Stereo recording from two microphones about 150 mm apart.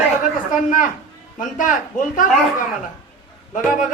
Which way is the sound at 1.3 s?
60° left (ahead or behind).